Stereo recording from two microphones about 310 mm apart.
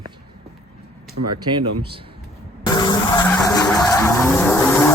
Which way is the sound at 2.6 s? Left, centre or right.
Centre.